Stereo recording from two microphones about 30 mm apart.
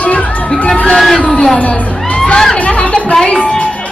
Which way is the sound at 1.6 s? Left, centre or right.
Left.